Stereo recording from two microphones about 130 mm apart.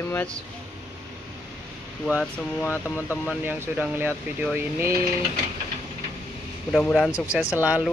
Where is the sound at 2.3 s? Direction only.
20° left (ahead or behind).